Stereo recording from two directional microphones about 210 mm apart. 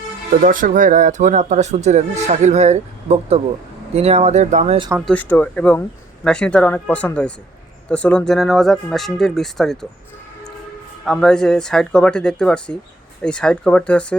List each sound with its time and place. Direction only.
0.4 s speech: 40° right (ahead or behind)
5.0 s speech: 5° left (ahead or behind)
11.0 s speech: 5° left (ahead or behind)